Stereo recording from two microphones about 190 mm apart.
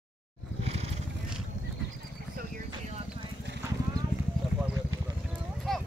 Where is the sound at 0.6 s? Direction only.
35° right (ahead or behind).